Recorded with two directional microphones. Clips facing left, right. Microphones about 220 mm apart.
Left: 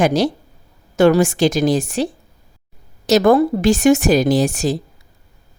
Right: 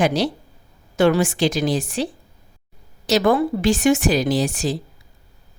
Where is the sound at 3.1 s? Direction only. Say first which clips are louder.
Left 5 dB; 45° left (ahead or behind).